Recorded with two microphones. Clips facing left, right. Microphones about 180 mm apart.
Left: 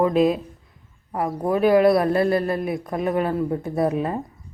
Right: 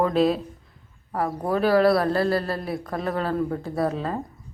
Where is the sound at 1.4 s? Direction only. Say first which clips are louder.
Left 3 dB; 15° left (ahead or behind).